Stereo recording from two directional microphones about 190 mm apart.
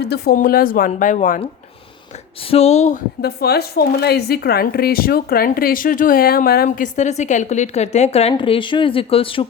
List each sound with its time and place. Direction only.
0.0 s speech: 55° left (ahead or behind)
2.4 s speech: 30° left (ahead or behind)
3.2 s speech: 55° left (ahead or behind); by 9.5 s 30° left (ahead or behind)